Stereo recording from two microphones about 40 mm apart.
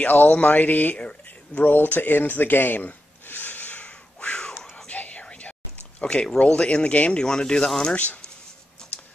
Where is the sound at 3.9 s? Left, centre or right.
Left.